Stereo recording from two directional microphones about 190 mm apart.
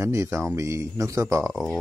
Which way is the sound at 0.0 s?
15° right (ahead or behind).